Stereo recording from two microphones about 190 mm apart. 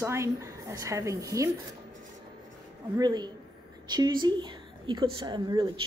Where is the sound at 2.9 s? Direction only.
20° right (ahead or behind).